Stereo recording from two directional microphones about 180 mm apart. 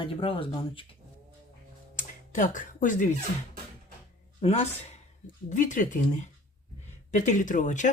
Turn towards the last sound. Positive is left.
turn(degrees=45)  # may be behind; listen again after turning